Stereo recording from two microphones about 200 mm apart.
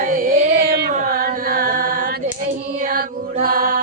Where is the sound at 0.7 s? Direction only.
50° right (ahead or behind).